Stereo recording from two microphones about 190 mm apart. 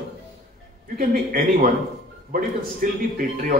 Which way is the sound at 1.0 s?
50° right (ahead or behind).